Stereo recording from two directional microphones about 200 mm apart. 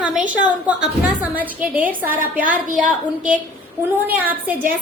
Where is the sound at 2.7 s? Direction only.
40° right (ahead or behind).